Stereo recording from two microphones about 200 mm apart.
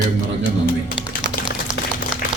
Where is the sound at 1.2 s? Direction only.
60° right (ahead or behind).